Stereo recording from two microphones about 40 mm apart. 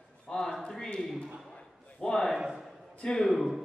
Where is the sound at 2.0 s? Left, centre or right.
Left.